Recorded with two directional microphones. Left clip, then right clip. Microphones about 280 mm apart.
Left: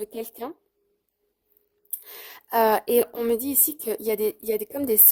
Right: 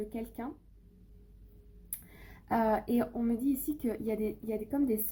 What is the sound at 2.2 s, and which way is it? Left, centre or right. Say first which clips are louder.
A woman's voice: left 9 dB; left.